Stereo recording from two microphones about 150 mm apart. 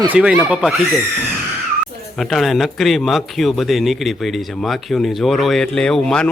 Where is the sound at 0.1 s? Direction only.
10° right (ahead or behind).